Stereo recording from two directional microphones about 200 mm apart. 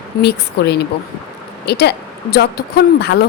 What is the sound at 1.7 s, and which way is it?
Speech, 55° left (ahead or behind).